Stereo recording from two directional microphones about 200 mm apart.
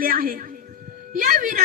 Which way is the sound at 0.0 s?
45° right (ahead or behind).